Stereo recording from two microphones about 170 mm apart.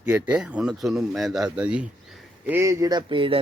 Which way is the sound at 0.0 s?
5° right (ahead or behind).